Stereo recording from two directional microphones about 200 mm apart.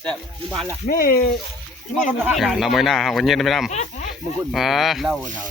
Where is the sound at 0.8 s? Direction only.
45° left (ahead or behind).